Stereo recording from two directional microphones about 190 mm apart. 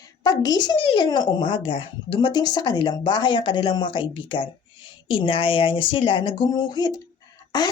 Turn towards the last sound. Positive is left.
turn(degrees=20)  # may be behind; listen again after turning